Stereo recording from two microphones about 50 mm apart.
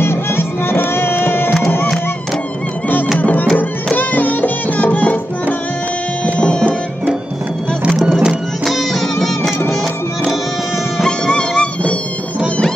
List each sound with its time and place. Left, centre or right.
0.0 s music: left
3.2 s music: left
6.4 s music: left
8.2 s music: centre
11.1 s music: centre